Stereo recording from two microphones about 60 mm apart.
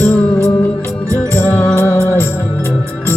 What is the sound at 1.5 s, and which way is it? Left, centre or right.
Music, left.